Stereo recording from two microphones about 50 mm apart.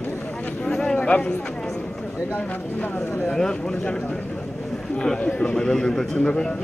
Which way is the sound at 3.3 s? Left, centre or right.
Centre.